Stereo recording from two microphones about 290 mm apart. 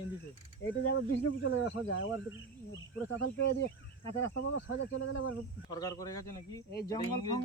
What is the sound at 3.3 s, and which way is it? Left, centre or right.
Speech, left.